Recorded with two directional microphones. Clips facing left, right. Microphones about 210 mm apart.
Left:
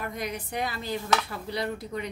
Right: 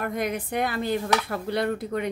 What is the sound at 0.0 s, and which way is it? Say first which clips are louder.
Speech: right 6 dB; 55° right (ahead or behind).